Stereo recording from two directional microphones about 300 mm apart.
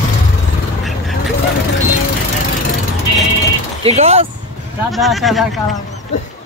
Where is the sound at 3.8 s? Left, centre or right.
Centre.